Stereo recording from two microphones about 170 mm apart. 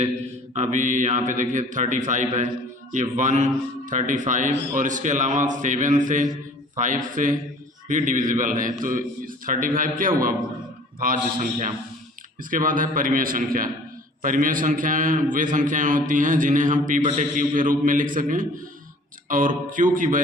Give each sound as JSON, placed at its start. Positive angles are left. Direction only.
{"t": 0.5, "sound": "a man's voice", "side_deg": -45}